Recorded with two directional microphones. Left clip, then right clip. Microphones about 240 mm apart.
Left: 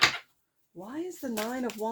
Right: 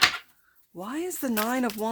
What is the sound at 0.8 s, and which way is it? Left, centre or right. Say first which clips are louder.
Speech: right 5 dB; right.